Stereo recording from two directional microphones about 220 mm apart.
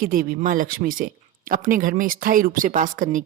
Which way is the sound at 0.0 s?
40° right (ahead or behind).